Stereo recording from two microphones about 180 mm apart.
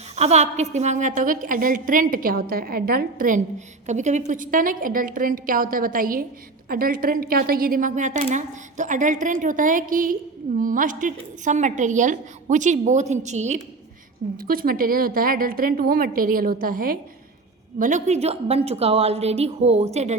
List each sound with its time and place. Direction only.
0.2 s a woman's voice: 35° right (ahead or behind)
14.3 s a woman's voice: 55° right (ahead or behind); by 20.1 s 35° right (ahead or behind)